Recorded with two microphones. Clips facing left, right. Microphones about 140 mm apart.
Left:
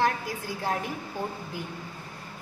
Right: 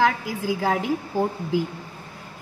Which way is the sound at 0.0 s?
90° right.